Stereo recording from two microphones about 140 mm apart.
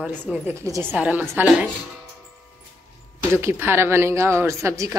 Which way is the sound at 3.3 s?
15° right (ahead or behind).